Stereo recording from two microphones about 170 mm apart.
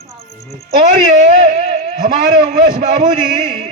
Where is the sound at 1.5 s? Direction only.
30° right (ahead or behind).